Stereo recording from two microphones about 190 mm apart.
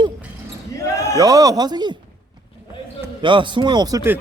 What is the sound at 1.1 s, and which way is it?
Speech, 20° right (ahead or behind).